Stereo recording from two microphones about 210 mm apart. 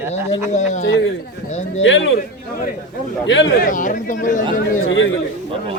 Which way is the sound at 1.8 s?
65° left (ahead or behind).